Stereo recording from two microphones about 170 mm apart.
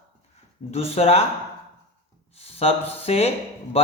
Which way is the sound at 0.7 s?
35° left (ahead or behind).